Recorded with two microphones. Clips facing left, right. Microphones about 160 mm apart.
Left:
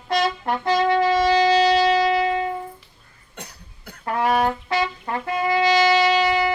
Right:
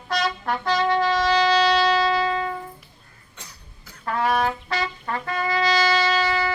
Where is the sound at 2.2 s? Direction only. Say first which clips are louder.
Left 2 dB; 20° left (ahead or behind).